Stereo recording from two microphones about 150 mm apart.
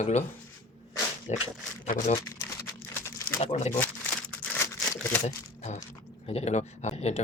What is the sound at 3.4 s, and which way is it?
Speech, 45° left (ahead or behind).